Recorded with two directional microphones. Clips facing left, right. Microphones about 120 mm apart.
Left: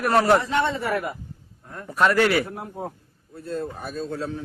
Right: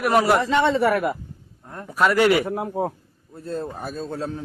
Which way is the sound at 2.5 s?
90° right.